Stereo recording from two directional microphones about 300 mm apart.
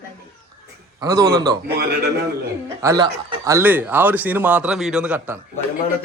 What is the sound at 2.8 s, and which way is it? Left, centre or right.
Speech, centre.